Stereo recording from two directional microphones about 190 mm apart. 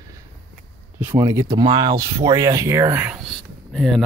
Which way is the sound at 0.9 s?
15° right (ahead or behind).